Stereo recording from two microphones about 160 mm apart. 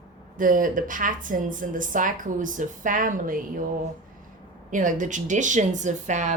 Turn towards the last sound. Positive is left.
turn(degrees=-50)  # may be behind; listen again after turning